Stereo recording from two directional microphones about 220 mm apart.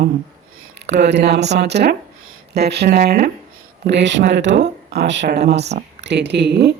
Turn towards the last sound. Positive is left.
turn(degrees=-50)  # may be behind; listen again after turning